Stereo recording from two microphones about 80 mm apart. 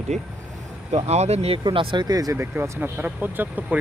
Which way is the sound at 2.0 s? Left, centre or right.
Right.